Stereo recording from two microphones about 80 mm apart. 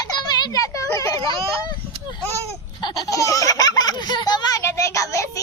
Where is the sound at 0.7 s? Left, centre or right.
Left.